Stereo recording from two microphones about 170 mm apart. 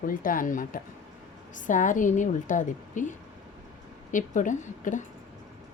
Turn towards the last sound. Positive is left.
turn(degrees=50)  # may be behind; listen again after turning